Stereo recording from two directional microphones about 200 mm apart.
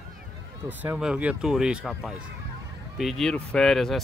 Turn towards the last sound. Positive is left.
turn(degrees=0)  # may be behind; listen again after turning